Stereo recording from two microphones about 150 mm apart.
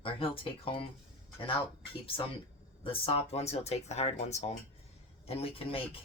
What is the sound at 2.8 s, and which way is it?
Speech, 40° left (ahead or behind).